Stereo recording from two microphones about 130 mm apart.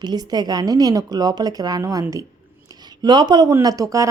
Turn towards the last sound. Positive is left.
turn(degrees=-25)  # may be behind; listen again after turning